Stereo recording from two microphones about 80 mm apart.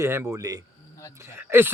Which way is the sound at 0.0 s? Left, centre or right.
Right.